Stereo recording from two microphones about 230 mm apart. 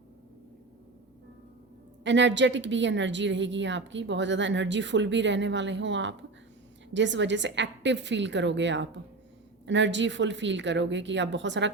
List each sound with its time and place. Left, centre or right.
2.0 s a woman's voice: right